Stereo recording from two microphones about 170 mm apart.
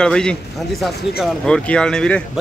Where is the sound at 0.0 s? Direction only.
5° left (ahead or behind).